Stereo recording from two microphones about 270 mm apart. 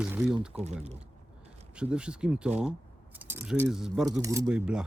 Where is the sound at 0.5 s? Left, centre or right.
Right.